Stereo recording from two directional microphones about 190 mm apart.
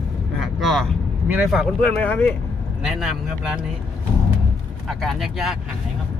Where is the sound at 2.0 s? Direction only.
10° left (ahead or behind).